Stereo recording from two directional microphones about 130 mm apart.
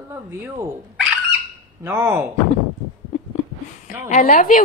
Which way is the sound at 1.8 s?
20° right (ahead or behind).